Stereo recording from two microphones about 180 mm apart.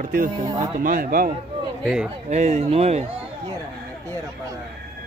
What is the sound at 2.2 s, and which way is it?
Speech, 40° right (ahead or behind).